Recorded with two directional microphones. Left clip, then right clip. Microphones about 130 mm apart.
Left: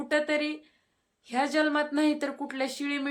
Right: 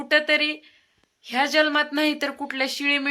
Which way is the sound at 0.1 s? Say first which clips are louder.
Right 8 dB; 15° right (ahead or behind).